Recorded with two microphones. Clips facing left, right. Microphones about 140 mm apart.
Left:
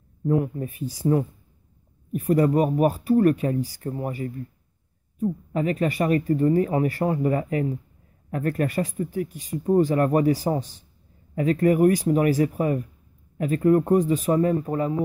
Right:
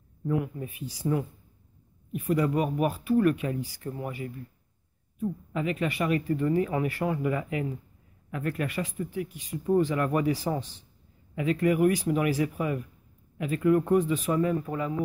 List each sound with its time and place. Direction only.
0.3 s speech: 40° left (ahead or behind)